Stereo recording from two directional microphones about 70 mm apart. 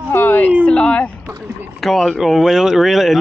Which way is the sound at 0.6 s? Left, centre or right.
Centre.